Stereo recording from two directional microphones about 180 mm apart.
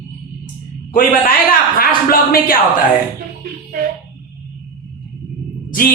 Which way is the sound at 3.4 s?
50° right (ahead or behind).